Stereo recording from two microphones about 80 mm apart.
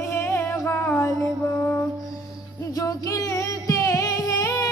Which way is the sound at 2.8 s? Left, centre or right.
Left.